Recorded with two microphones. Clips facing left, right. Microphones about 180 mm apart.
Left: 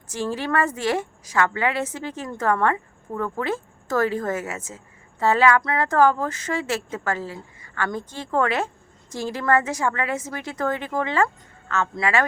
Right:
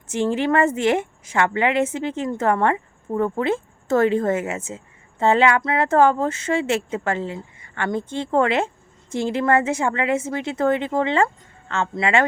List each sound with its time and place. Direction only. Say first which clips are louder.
0.1 s a woman's voice: right 5 dB; 25° right (ahead or behind)